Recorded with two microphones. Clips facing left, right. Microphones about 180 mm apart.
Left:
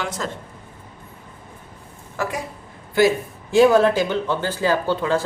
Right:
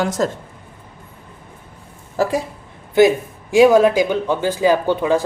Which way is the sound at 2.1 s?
30° right (ahead or behind).